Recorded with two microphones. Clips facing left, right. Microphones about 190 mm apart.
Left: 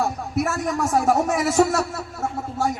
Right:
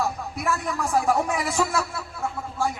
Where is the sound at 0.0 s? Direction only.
45° left (ahead or behind).